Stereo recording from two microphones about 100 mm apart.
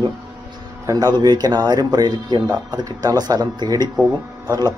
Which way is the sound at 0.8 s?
40° right (ahead or behind).